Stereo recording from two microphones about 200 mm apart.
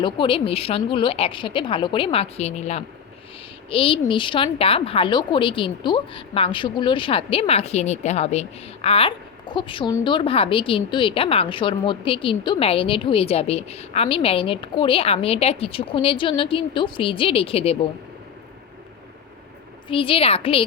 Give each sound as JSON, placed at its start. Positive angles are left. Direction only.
{"t": 0.0, "sound": "speech", "side_deg": 25}
{"t": 19.9, "sound": "speech", "side_deg": 25}